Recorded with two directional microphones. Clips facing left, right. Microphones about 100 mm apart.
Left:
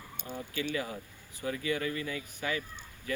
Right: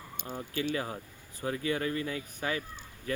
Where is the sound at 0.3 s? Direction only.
35° right (ahead or behind).